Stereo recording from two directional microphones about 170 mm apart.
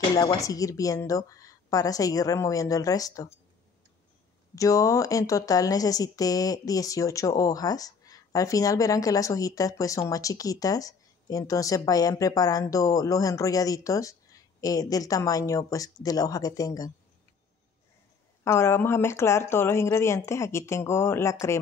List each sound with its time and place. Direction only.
0.4 s speech: 20° left (ahead or behind)
4.6 s speech: 20° left (ahead or behind)
18.4 s speech: 15° left (ahead or behind)